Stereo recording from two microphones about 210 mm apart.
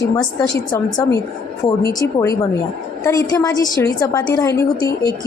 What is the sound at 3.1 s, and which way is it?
A woman's voice, 15° left (ahead or behind).